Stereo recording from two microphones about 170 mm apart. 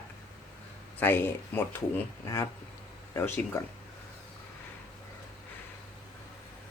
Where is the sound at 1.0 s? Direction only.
10° left (ahead or behind).